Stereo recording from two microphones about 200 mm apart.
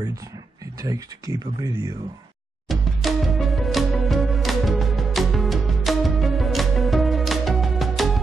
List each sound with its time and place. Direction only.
0.8 s speech: 15° right (ahead or behind)
2.7 s music: centre (ahead or behind)